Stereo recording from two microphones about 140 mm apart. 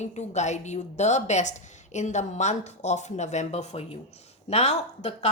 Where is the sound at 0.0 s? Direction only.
55° left (ahead or behind).